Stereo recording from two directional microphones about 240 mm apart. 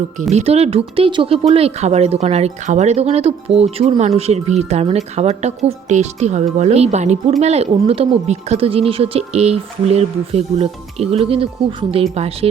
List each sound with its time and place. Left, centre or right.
0.2 s speech: right